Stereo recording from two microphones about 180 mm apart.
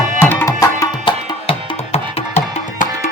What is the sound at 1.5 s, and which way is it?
Music, 35° left (ahead or behind).